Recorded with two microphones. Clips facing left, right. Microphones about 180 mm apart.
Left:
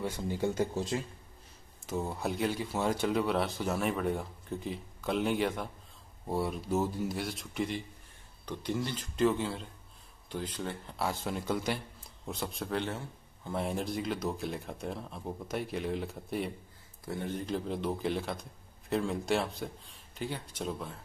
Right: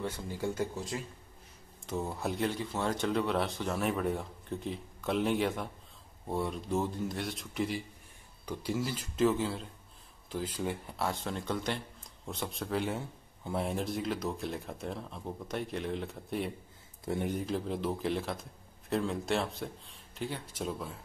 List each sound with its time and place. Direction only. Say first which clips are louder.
0.4 s speech: left 3 dB; 25° left (ahead or behind)
1.9 s speech: left 1 dB; centre (ahead or behind)
11.0 s speech: left 4 dB; 5° left (ahead or behind)
12.9 s a man's voice: right 2 dB; 10° right (ahead or behind)
13.6 s speech: even; centre (ahead or behind)
17.0 s speech: right 3 dB; 20° right (ahead or behind)
17.4 s speech: even; centre (ahead or behind)